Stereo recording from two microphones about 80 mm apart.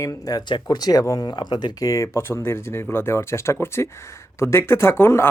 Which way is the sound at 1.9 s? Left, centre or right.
Left.